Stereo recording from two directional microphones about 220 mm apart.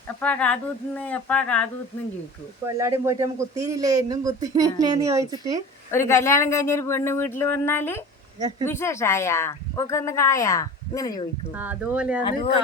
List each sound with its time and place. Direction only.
0.2 s speech: 5° left (ahead or behind)
2.6 s speech: 15° right (ahead or behind)
5.9 s speech: 10° left (ahead or behind)
8.4 s speech: 20° right (ahead or behind)
8.6 s speech: 10° left (ahead or behind)
11.5 s speech: 10° right (ahead or behind)
12.2 s speech: 20° left (ahead or behind)